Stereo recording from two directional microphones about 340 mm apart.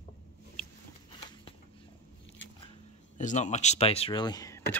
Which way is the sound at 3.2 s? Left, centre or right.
Left.